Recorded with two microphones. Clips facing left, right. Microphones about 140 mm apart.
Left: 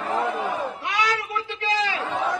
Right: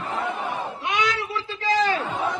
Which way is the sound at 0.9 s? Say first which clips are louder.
Right 2 dB; 20° right (ahead or behind).